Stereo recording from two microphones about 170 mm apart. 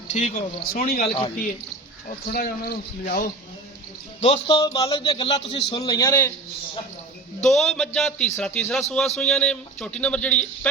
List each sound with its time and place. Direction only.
0.1 s speech: 45° left (ahead or behind)
0.7 s speech: 60° left (ahead or behind)
1.0 s a man's voice: 30° left (ahead or behind)
2.0 s speech: 55° left (ahead or behind)
4.2 s a man's voice: 30° left (ahead or behind); by 6.3 s 15° left (ahead or behind)
7.4 s a man's voice: centre (ahead or behind)